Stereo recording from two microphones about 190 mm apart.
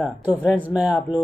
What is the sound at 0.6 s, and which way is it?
Speech, 5° right (ahead or behind).